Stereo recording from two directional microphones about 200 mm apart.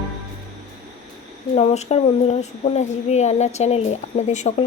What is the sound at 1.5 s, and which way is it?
Speech, 35° left (ahead or behind).